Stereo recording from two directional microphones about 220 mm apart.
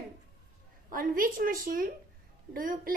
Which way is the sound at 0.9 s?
40° right (ahead or behind).